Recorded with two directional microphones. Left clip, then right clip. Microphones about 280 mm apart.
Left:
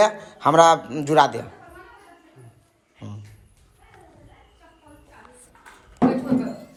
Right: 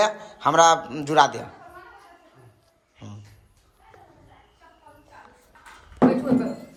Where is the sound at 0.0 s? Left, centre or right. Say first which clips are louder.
Left 3 dB; centre.